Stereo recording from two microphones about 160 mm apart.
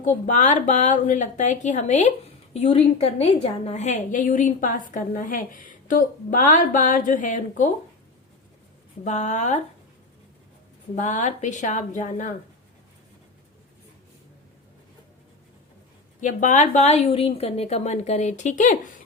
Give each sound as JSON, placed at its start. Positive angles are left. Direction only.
{"t": 0.0, "sound": "a woman's voice", "side_deg": 50}
{"t": 9.0, "sound": "a woman's voice", "side_deg": 50}
{"t": 10.9, "sound": "a woman's voice", "side_deg": 50}
{"t": 16.2, "sound": "a woman's voice", "side_deg": 55}